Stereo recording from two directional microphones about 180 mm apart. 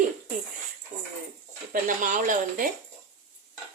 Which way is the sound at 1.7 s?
50° right (ahead or behind).